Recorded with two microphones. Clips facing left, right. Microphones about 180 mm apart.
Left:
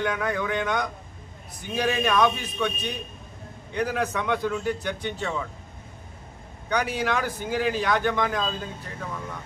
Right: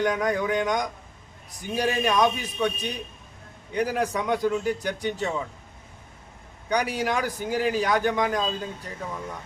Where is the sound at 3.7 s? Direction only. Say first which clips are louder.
Right 1 dB; 10° right (ahead or behind).